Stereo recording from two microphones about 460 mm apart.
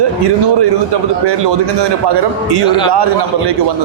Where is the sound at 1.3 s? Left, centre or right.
Right.